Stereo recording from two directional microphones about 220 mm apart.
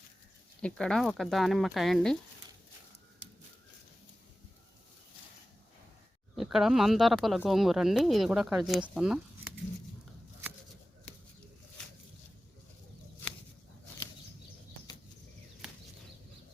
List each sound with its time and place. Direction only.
0.6 s speech: 5° left (ahead or behind)
6.3 s speech: centre (ahead or behind)